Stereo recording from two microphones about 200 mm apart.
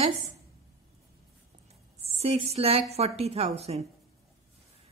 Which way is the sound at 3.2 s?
30° right (ahead or behind).